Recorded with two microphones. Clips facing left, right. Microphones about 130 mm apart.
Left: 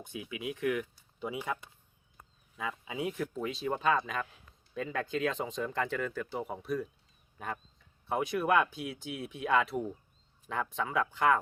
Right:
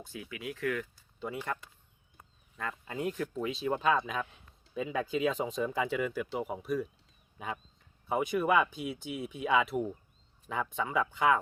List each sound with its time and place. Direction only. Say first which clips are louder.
0.0 s speech: left 2 dB; 20° left (ahead or behind)
2.6 s speech: even; 5° left (ahead or behind)